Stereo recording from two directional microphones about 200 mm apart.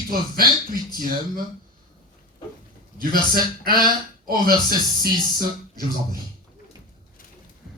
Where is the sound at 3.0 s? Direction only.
45° right (ahead or behind).